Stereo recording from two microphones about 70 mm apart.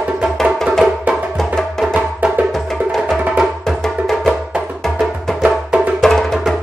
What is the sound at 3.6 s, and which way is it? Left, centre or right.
Music, centre.